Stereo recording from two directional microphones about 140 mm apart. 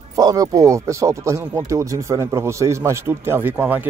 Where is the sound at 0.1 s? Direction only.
25° right (ahead or behind).